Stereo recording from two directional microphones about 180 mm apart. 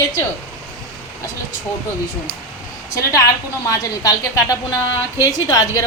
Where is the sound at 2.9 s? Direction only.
20° left (ahead or behind).